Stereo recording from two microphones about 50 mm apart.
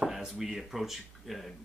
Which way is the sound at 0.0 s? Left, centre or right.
Centre.